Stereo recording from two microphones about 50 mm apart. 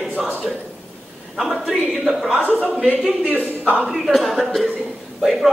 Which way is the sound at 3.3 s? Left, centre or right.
Right.